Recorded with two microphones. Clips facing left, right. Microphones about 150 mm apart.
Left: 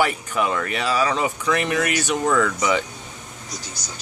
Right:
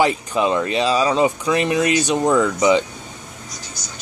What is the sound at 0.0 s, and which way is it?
Speech, 25° right (ahead or behind).